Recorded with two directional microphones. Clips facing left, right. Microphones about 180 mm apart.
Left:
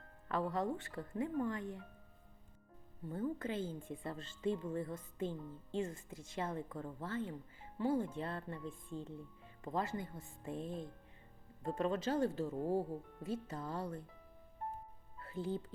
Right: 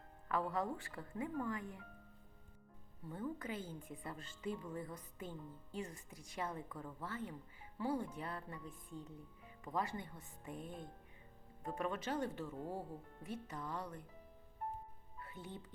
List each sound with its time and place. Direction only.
0.3 s speech: 25° left (ahead or behind)
3.1 s speech: 30° left (ahead or behind)
15.2 s music: 30° left (ahead or behind)